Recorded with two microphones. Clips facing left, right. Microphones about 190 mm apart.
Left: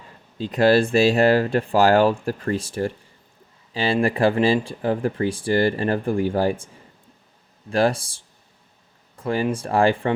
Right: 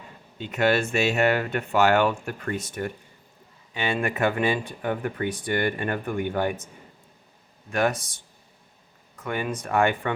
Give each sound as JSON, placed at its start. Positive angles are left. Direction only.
{"t": 0.3, "sound": "speech", "side_deg": 35}
{"t": 7.7, "sound": "speech", "side_deg": 30}